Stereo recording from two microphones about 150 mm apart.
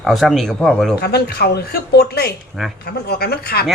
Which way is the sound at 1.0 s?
90° left.